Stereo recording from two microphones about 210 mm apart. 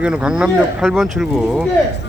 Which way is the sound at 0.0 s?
5° right (ahead or behind).